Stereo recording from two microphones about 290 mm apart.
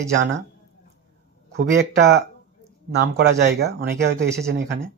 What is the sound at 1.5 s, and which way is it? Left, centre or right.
Speech, right.